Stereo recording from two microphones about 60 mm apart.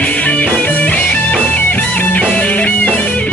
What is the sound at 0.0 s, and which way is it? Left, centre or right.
Music, left.